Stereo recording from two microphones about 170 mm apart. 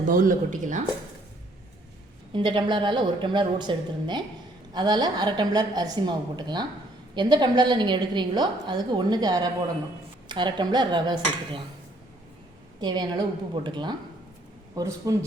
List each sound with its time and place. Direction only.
0.1 s speech: 50° right (ahead or behind)
2.3 s a woman's voice: 25° right (ahead or behind)
12.8 s a woman's voice: 25° right (ahead or behind)